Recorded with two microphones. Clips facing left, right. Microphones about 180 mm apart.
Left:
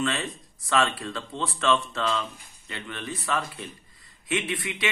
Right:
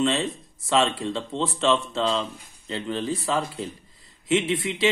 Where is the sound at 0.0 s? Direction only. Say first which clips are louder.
Right 5 dB; 25° right (ahead or behind).